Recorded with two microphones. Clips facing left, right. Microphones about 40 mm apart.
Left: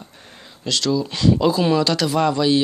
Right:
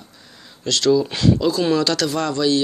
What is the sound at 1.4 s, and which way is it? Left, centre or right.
Speech, centre.